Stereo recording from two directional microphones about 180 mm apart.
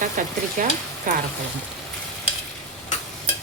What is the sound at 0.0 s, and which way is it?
Speech, 45° right (ahead or behind).